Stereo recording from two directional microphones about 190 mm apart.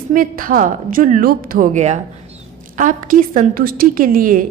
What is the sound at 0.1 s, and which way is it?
A woman's voice, 45° right (ahead or behind).